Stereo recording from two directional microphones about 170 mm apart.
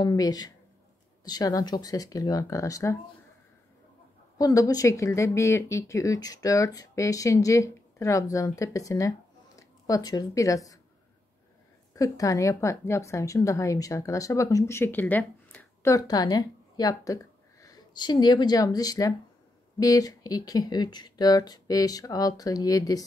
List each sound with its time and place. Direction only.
0.0 s speech: 20° left (ahead or behind)
4.4 s speech: 20° left (ahead or behind)
11.9 s a woman's voice: 20° left (ahead or behind)